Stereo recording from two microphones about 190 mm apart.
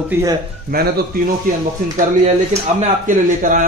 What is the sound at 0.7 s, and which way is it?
Speech, 55° right (ahead or behind).